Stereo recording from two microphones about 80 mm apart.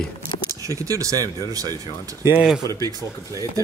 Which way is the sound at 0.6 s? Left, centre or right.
Right.